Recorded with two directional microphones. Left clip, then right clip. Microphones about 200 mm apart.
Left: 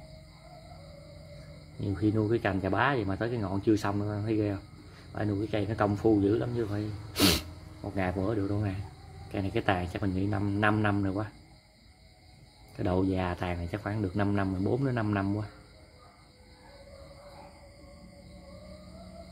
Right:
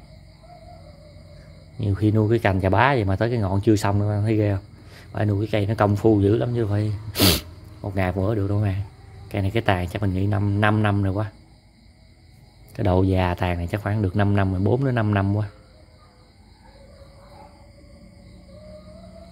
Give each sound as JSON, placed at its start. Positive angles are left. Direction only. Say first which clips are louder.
{"t": 1.8, "sound": "speech", "louder": "right 6 dB", "side_deg": -30}
{"t": 12.7, "sound": "speech", "louder": "right 8 dB", "side_deg": -30}